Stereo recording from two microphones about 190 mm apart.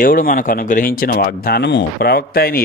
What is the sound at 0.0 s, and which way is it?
Speech, 45° left (ahead or behind).